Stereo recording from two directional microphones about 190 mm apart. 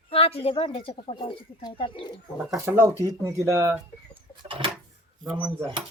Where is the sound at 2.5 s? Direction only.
10° right (ahead or behind).